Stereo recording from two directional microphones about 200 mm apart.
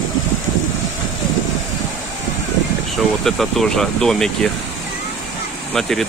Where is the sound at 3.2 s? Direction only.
Centre (ahead or behind).